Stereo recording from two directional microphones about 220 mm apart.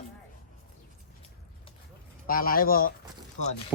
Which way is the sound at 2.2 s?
40° left (ahead or behind).